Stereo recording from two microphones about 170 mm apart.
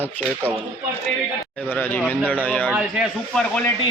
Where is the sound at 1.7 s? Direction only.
10° left (ahead or behind).